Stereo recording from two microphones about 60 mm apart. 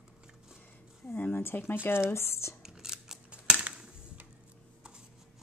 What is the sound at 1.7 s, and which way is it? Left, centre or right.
Speech, left.